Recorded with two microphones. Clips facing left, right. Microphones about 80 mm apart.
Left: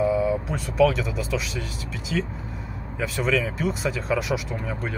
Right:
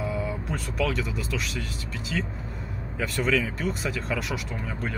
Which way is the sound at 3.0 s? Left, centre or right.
Centre.